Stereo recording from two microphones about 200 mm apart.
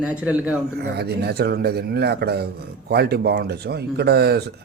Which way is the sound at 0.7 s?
55° right (ahead or behind).